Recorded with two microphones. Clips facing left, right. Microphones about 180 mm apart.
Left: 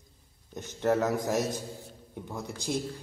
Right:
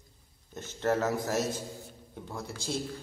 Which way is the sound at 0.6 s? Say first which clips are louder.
Left 2 dB; 15° left (ahead or behind).